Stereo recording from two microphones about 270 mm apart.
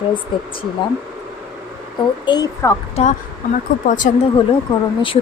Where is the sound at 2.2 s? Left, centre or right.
Centre.